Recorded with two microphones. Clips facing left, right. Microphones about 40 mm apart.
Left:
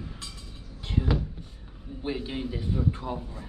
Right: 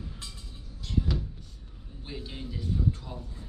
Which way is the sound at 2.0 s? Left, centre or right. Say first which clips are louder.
Left 9 dB; left.